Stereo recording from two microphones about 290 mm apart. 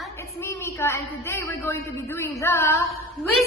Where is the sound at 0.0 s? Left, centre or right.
Centre.